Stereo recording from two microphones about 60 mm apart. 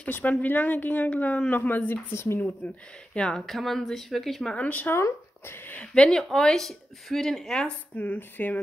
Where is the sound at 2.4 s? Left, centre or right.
Left.